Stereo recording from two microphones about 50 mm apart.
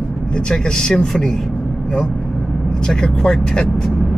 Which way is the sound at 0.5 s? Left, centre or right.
Centre.